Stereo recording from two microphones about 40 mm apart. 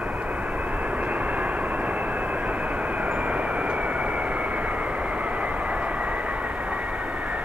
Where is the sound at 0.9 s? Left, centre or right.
Right.